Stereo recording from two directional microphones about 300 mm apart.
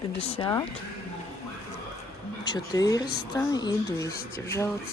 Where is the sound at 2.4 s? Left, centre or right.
Centre.